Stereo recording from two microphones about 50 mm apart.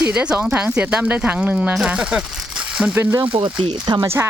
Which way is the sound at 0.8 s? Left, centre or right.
Right.